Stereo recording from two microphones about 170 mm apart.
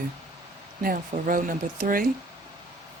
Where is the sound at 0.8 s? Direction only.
55° right (ahead or behind).